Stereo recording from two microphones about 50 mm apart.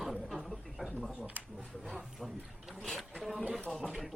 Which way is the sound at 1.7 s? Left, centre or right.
Centre.